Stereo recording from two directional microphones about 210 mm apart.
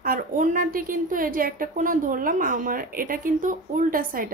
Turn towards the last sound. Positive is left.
turn(degrees=-40)  # may be behind; listen again after turning